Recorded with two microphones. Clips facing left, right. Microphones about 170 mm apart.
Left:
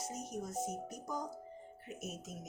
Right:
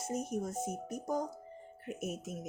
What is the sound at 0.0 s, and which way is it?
A woman's voice, 55° right (ahead or behind).